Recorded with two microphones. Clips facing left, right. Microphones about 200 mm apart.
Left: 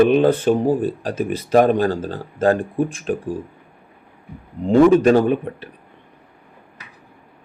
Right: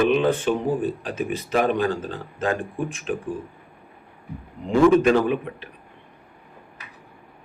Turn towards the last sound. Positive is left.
turn(degrees=40)  # may be behind; listen again after turning